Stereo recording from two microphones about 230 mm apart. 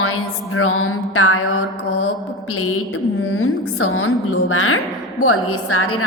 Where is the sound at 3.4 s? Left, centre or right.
Left.